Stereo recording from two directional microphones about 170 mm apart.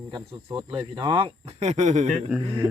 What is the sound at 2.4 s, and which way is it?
Speech, 30° right (ahead or behind).